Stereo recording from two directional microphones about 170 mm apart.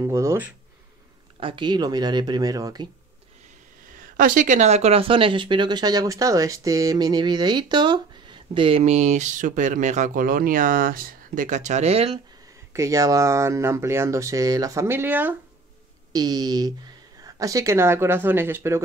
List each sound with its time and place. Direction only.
0.0 s speech: 15° right (ahead or behind)
1.4 s speech: 30° right (ahead or behind)
4.0 s speech: 50° right (ahead or behind); by 12.2 s 35° right (ahead or behind)
12.7 s speech: 20° right (ahead or behind)
16.1 s speech: 20° right (ahead or behind)